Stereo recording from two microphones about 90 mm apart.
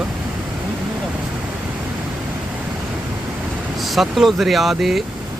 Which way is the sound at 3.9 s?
Centre (ahead or behind).